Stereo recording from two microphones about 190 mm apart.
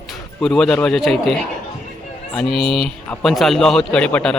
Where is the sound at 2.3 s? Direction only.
Centre (ahead or behind).